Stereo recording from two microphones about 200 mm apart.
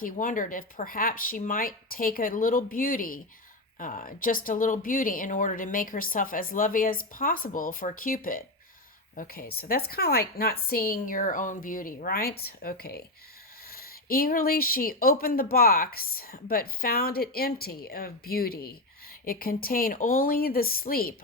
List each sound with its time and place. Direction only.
0.0 s speech: 40° left (ahead or behind)